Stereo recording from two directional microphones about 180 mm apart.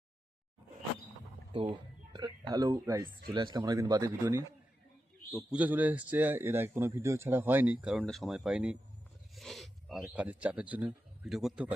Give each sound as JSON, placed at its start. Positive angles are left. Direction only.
{"t": 1.5, "sound": "speech", "side_deg": -25}
{"t": 5.5, "sound": "a man's voice", "side_deg": -10}